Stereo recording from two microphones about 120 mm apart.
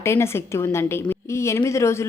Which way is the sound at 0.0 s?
20° left (ahead or behind).